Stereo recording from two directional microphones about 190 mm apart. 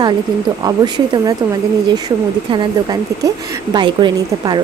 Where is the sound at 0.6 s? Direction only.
20° right (ahead or behind).